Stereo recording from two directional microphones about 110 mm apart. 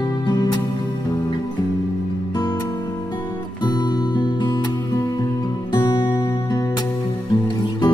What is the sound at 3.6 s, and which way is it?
Music, 40° left (ahead or behind).